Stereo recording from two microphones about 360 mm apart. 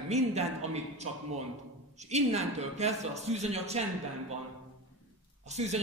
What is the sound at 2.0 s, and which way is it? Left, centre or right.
A man's voice, centre.